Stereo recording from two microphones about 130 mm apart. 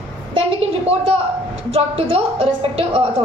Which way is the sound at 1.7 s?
50° right (ahead or behind).